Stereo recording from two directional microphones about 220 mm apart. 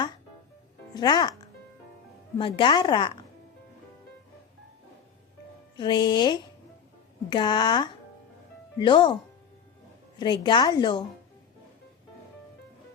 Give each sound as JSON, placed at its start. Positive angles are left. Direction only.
{"t": 0.9, "sound": "a woman's voice", "side_deg": 20}
{"t": 2.4, "sound": "a woman's voice", "side_deg": 20}
{"t": 5.7, "sound": "a woman's voice", "side_deg": 20}
{"t": 10.2, "sound": "a woman's voice", "side_deg": 20}